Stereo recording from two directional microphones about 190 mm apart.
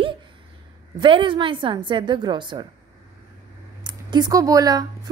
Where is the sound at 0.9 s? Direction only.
25° right (ahead or behind).